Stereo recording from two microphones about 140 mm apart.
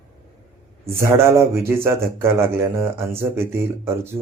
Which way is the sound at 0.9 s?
20° right (ahead or behind).